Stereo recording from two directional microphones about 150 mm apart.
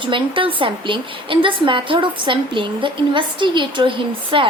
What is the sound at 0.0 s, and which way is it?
A woman's voice, 35° right (ahead or behind).